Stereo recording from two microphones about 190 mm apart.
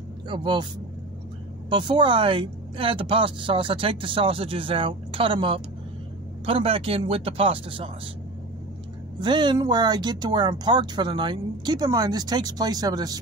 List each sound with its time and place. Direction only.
0.3 s speech: 25° right (ahead or behind)
1.7 s speech: 25° right (ahead or behind)
9.2 s speech: 25° right (ahead or behind)